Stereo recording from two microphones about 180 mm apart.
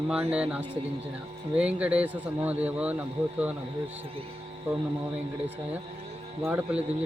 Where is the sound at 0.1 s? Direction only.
5° right (ahead or behind).